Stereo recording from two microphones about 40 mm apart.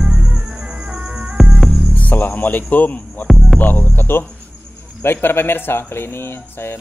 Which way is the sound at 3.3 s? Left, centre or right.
Centre.